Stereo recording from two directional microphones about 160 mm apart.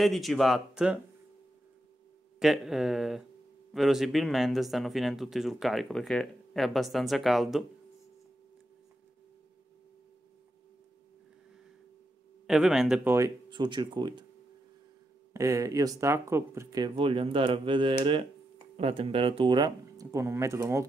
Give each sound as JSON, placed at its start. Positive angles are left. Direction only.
{"t": 0.0, "sound": "speech", "side_deg": 0}
{"t": 2.3, "sound": "speech", "side_deg": -5}
{"t": 12.4, "sound": "speech", "side_deg": 0}
{"t": 13.5, "sound": "speech", "side_deg": -30}
{"t": 15.3, "sound": "speech", "side_deg": -20}
{"t": 16.9, "sound": "speech", "side_deg": -35}